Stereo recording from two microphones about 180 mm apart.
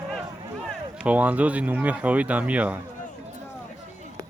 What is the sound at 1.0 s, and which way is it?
Speech, 10° right (ahead or behind).